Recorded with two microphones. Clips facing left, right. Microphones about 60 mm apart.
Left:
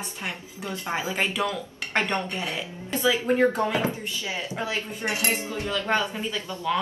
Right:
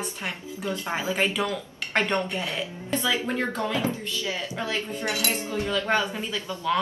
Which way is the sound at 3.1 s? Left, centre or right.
Centre.